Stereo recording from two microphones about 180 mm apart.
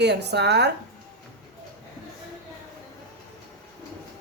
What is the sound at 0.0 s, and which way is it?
Speech, 70° right (ahead or behind).